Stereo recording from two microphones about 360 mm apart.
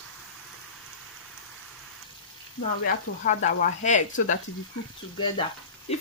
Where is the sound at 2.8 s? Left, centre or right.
Left.